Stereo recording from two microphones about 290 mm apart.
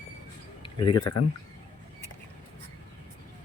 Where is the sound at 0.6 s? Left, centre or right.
Centre.